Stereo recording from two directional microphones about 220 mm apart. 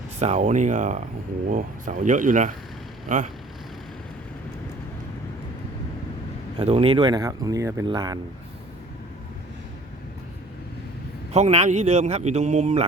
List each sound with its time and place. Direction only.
0.2 s a man's voice: 30° right (ahead or behind)
6.6 s speech: 25° right (ahead or behind)
11.3 s a man's voice: 30° right (ahead or behind)